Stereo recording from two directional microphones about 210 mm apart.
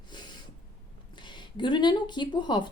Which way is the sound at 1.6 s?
20° left (ahead or behind).